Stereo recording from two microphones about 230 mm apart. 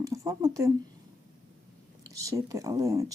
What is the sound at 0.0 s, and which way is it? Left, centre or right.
Speech, centre.